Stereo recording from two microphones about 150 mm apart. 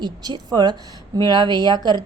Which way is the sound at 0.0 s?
25° right (ahead or behind).